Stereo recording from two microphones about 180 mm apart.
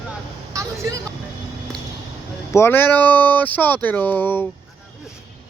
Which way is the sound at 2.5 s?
15° left (ahead or behind).